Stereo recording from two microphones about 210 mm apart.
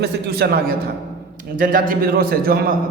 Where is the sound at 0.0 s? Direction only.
50° right (ahead or behind).